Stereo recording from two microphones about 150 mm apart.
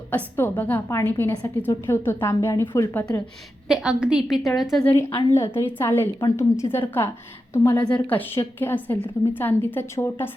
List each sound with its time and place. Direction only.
0.1 s a woman's voice: 10° left (ahead or behind)
3.7 s a woman's voice: 5° right (ahead or behind)
4.9 s a woman's voice: 15° left (ahead or behind)